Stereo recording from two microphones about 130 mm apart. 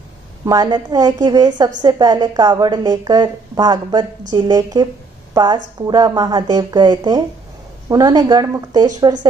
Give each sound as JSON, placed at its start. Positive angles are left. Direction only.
{"t": 0.5, "sound": "a woman's voice", "side_deg": -35}